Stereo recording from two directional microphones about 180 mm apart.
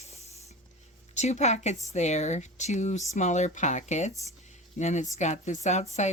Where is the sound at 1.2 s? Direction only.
40° left (ahead or behind).